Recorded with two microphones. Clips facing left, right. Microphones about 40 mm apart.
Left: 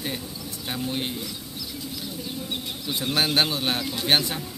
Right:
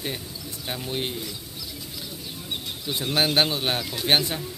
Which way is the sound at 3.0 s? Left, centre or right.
Centre.